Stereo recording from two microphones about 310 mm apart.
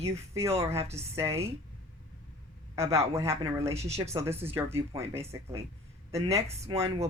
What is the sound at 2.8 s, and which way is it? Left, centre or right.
Speech, centre.